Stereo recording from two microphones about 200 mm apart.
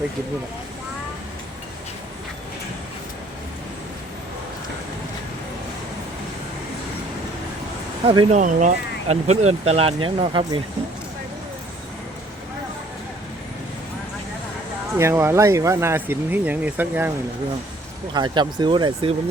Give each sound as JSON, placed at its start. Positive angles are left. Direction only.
{"t": 8.0, "sound": "speech", "side_deg": -25}
{"t": 8.4, "sound": "speech", "side_deg": -40}
{"t": 14.9, "sound": "speech", "side_deg": -15}
{"t": 18.1, "sound": "speech", "side_deg": -20}